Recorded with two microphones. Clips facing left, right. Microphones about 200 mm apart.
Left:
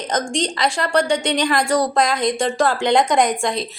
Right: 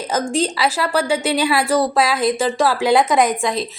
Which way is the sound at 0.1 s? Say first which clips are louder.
Right 2 dB; 5° right (ahead or behind).